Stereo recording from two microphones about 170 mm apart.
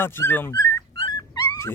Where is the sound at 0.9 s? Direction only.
30° left (ahead or behind).